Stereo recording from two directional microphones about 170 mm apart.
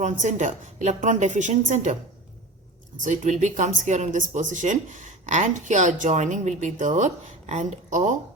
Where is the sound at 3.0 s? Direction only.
45° right (ahead or behind).